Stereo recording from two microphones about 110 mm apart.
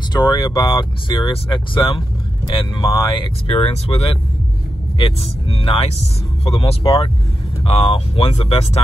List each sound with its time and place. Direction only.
0.1 s speech: 40° left (ahead or behind)
3.2 s speech: 65° left (ahead or behind)